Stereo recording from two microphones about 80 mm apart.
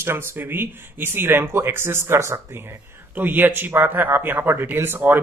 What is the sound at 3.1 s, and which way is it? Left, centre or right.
Speech, right.